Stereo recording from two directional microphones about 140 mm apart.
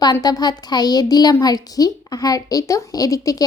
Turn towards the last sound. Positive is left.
turn(degrees=25)  # may be behind; listen again after turning